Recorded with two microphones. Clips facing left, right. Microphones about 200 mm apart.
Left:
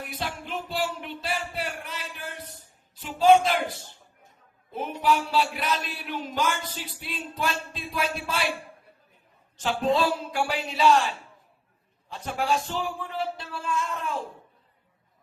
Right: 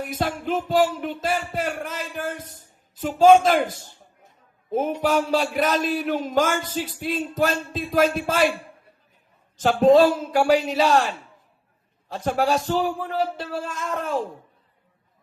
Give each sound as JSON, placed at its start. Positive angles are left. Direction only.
{"t": 0.1, "sound": "music", "side_deg": -45}
{"t": 2.9, "sound": "a man's voice", "side_deg": -45}
{"t": 4.7, "sound": "a man's voice", "side_deg": -45}
{"t": 9.6, "sound": "speech", "side_deg": -40}